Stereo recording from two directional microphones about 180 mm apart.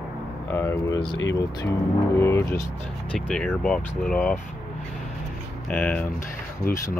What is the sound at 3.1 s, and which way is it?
Speech, 5° left (ahead or behind).